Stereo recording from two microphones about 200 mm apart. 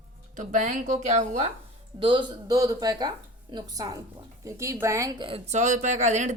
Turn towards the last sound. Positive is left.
turn(degrees=-35)  # may be behind; listen again after turning